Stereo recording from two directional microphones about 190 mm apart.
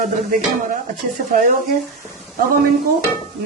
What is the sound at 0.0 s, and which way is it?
Speech, 40° right (ahead or behind).